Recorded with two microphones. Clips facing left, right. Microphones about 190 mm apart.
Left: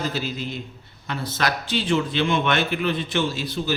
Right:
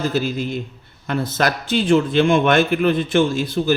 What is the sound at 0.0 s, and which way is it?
A man's voice, 50° right (ahead or behind).